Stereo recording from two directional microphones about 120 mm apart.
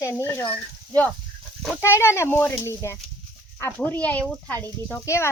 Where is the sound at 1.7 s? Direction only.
20° left (ahead or behind).